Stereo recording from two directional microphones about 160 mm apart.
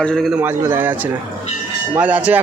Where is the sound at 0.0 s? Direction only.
5° left (ahead or behind).